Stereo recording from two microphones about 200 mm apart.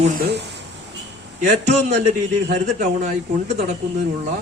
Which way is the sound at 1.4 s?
35° right (ahead or behind).